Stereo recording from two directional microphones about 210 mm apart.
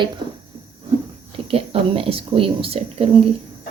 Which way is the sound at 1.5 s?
25° right (ahead or behind).